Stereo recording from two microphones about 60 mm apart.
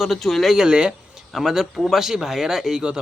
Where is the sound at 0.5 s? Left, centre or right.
Centre.